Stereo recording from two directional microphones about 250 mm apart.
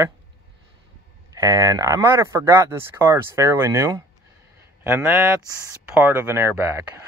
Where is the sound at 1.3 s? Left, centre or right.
Centre.